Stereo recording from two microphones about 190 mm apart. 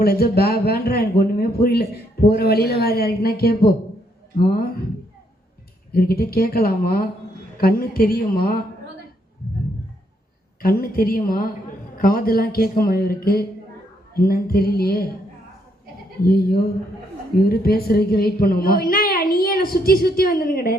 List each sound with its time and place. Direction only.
0.0 s a woman's voice: 55° left (ahead or behind)
5.9 s a woman's voice: 55° left (ahead or behind)
10.6 s a woman's voice: 50° left (ahead or behind)
16.2 s a woman's voice: 55° left (ahead or behind)